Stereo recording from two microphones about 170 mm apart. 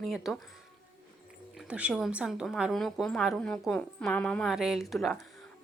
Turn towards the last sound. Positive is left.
turn(degrees=0)  # may be behind; listen again after turning